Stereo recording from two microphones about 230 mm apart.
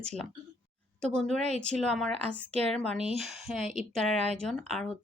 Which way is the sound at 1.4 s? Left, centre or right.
Right.